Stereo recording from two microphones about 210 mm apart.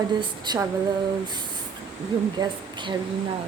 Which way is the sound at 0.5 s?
20° right (ahead or behind).